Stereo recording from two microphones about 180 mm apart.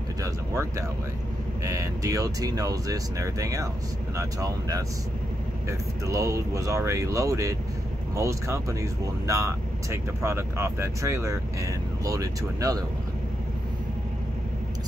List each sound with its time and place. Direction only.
0.2 s speech: 15° right (ahead or behind)